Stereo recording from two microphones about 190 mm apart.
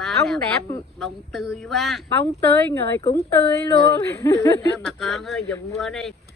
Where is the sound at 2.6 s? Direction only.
10° left (ahead or behind).